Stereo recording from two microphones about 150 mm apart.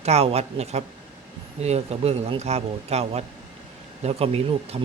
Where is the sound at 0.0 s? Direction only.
45° right (ahead or behind).